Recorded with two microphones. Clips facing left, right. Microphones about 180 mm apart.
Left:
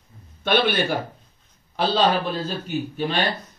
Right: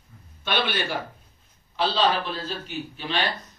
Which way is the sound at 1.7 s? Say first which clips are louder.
Left 3 dB; 50° left (ahead or behind).